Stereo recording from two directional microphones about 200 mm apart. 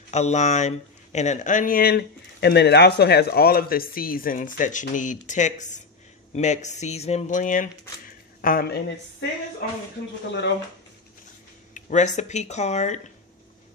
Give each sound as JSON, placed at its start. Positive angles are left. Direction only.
{"t": 0.1, "sound": "speech", "side_deg": 35}
{"t": 11.7, "sound": "speech", "side_deg": 35}